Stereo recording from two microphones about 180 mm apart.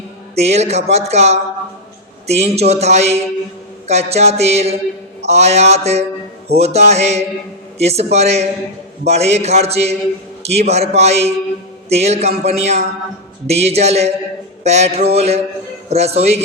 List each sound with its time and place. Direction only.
0.3 s speech: 35° right (ahead or behind)
14.6 s a sound: 35° right (ahead or behind)
15.1 s speech: 35° right (ahead or behind)